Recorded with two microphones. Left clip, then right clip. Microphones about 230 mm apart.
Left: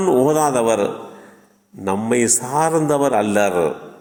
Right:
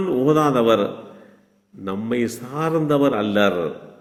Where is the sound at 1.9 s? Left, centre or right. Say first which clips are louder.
Left 6 dB; centre.